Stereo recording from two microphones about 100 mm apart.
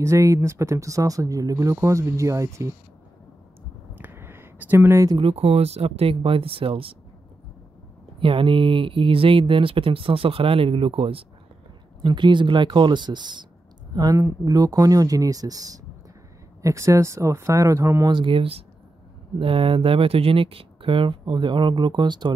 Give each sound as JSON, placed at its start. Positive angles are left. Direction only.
{"t": 0.0, "sound": "speech", "side_deg": -30}
{"t": 3.9, "sound": "a sound", "side_deg": -20}
{"t": 5.1, "sound": "speech", "side_deg": -75}
{"t": 8.2, "sound": "speech", "side_deg": -60}
{"t": 12.0, "sound": "speech", "side_deg": -50}
{"t": 13.9, "sound": "speech", "side_deg": -35}
{"t": 18.0, "sound": "speech", "side_deg": -55}